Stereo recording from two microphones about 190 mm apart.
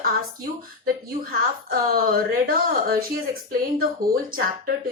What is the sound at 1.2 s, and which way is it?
Speech, 50° right (ahead or behind).